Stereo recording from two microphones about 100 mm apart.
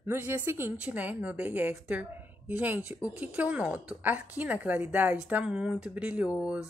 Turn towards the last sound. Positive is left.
turn(degrees=-10)  # may be behind; listen again after turning